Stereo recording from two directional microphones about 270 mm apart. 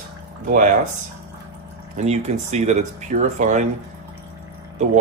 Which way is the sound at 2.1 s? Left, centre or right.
Right.